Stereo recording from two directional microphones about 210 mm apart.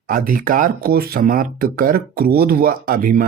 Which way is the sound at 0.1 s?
40° right (ahead or behind).